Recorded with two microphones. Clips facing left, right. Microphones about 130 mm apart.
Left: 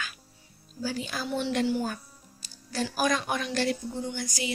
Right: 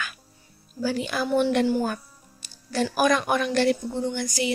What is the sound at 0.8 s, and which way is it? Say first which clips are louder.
A woman's voice: right 7 dB; 70° right (ahead or behind).